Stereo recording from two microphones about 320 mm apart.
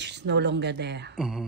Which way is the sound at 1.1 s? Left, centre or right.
Centre.